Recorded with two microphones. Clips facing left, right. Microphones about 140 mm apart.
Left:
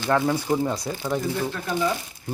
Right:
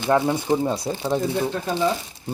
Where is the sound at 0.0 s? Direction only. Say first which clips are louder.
Right 2 dB; 20° right (ahead or behind).